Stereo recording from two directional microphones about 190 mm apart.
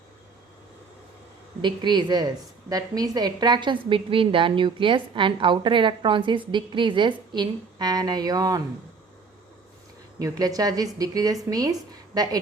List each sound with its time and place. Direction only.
1.6 s a woman's voice: 25° right (ahead or behind)
10.2 s a woman's voice: 20° right (ahead or behind)